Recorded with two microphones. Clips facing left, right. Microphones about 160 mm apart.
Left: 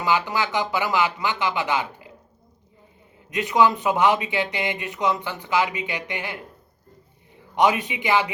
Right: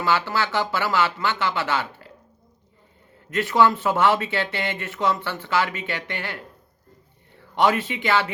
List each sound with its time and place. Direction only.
0.0 s speech: 15° left (ahead or behind)
3.2 s speech: 15° left (ahead or behind)